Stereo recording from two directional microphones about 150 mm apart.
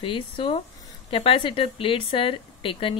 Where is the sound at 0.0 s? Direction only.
35° left (ahead or behind).